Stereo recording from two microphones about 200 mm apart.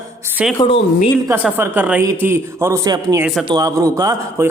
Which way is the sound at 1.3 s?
10° right (ahead or behind).